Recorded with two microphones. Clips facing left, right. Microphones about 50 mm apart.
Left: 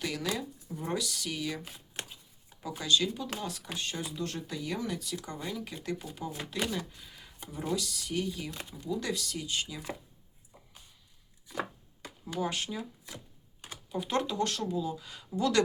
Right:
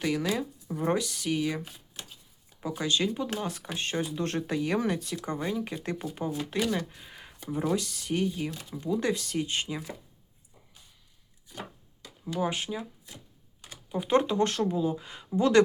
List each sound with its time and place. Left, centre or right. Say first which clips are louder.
0.0 s speech: right 5 dB; right
2.0 s chopping: left 4 dB; left
2.6 s speech: right 1 dB; right
12.4 s speech: right 3 dB; centre
13.9 s speech: right 6 dB; right